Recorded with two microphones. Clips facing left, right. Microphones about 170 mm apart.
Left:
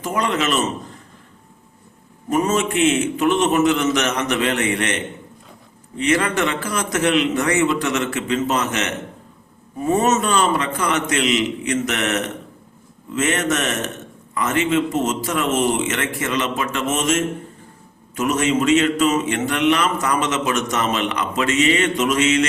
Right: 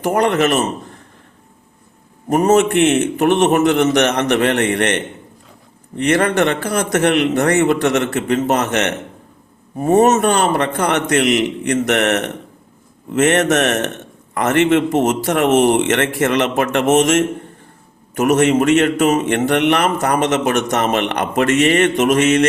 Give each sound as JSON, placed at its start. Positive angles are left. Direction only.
{"t": 0.0, "sound": "a man's voice", "side_deg": -65}
{"t": 2.3, "sound": "a man's voice", "side_deg": -60}
{"t": 6.0, "sound": "a man's voice", "side_deg": -60}